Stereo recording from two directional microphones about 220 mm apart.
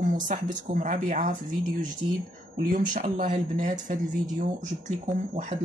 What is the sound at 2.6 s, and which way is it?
Speech, 35° right (ahead or behind).